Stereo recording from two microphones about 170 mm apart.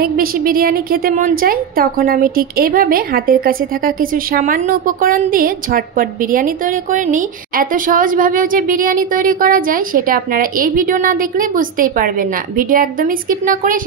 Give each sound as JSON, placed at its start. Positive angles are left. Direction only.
{"t": 0.0, "sound": "a woman's voice", "side_deg": -60}